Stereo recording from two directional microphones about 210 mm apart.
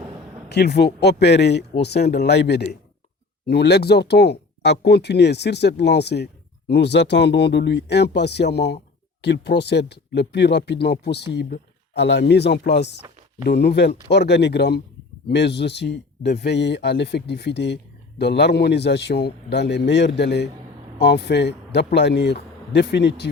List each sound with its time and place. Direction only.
0.5 s speech: 50° left (ahead or behind)